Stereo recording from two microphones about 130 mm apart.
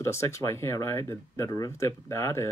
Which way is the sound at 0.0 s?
20° left (ahead or behind).